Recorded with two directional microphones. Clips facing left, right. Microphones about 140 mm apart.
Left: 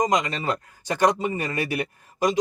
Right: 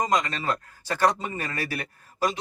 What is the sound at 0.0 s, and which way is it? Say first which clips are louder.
Speech: left 2 dB; 15° left (ahead or behind).